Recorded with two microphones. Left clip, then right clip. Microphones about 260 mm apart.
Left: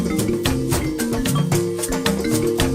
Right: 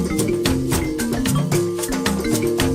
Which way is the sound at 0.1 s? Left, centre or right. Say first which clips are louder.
Right 2 dB; centre.